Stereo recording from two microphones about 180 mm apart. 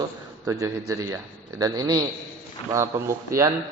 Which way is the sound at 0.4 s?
20° right (ahead or behind).